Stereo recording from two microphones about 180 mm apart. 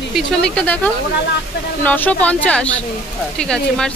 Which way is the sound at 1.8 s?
10° left (ahead or behind).